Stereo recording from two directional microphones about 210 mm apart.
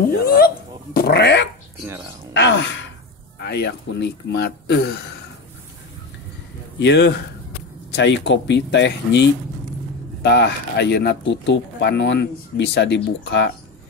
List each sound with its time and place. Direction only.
0.9 s speech: 50° left (ahead or behind)
2.3 s sigh: 60° left (ahead or behind)
3.3 s speech: 50° left (ahead or behind)
6.8 s speech: 55° left (ahead or behind)